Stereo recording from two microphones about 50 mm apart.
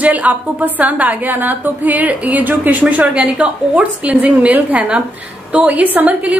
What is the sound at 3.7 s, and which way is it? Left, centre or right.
A woman's voice, right.